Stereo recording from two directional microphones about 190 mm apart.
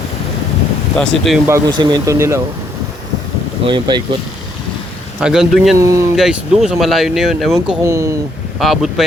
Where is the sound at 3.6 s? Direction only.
25° right (ahead or behind).